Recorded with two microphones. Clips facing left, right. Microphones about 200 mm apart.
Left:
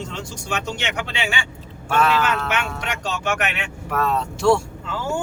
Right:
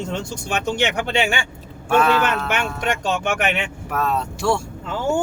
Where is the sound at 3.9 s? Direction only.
5° right (ahead or behind).